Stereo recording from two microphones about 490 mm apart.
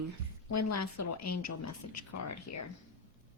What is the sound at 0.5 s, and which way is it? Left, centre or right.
A woman's voice, left.